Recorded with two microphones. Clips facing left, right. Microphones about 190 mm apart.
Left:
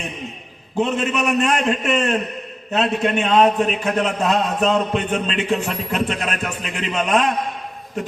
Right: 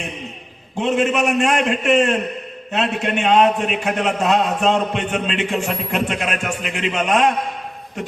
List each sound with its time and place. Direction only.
0.8 s a man's voice: 35° left (ahead or behind)